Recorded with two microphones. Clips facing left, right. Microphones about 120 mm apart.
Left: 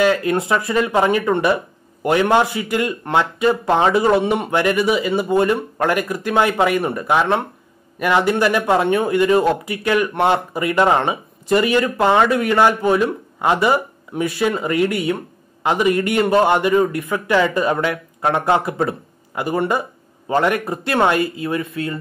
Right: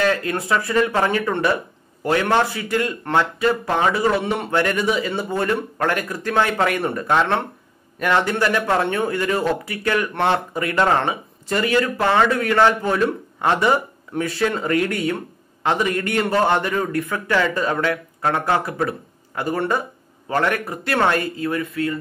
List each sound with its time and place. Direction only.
0.0 s speech: 15° left (ahead or behind)
19.3 s speech: 15° left (ahead or behind)